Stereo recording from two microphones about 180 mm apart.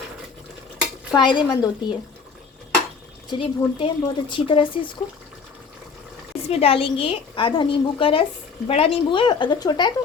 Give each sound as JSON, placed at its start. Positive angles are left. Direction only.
{"t": 1.1, "sound": "a woman's voice", "side_deg": 25}
{"t": 3.2, "sound": "a woman's voice", "side_deg": 30}
{"t": 6.5, "sound": "a woman's voice", "side_deg": 30}